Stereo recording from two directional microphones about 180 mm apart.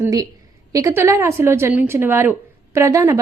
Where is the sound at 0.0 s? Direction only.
20° right (ahead or behind).